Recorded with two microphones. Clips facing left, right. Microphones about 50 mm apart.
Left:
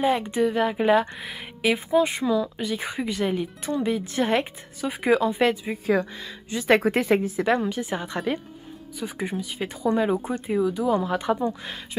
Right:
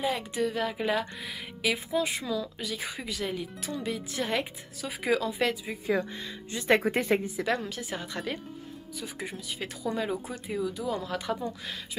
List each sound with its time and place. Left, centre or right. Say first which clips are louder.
0.0 s speech: left 7 dB; left
6.5 s a woman's voice: left 5 dB; left
7.4 s speech: left 7 dB; left
10.1 s speech: left 8 dB; left
10.4 s speech: left 8 dB; left